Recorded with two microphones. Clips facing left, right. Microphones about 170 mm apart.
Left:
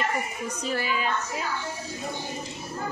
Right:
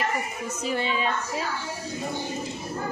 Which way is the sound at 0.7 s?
25° right (ahead or behind).